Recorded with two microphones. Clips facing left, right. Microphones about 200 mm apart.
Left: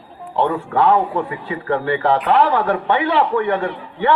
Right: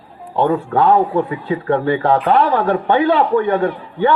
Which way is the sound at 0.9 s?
40° right (ahead or behind).